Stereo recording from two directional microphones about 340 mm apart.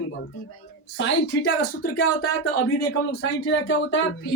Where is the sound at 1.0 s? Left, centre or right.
Left.